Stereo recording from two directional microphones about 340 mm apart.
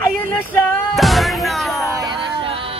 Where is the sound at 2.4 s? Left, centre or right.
Centre.